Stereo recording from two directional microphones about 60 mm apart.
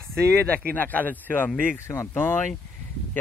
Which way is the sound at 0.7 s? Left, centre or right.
Left.